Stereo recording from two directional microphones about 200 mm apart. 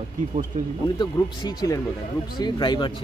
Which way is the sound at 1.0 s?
20° left (ahead or behind).